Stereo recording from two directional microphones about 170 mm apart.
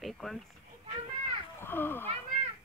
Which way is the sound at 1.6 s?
10° left (ahead or behind).